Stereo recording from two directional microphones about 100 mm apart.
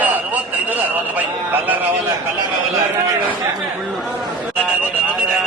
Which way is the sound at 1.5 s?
15° right (ahead or behind).